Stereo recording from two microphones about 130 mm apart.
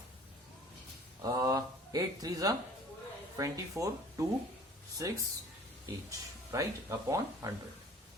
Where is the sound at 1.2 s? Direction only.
25° right (ahead or behind).